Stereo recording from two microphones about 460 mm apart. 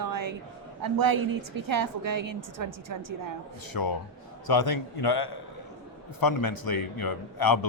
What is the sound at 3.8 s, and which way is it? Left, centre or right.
Speech, left.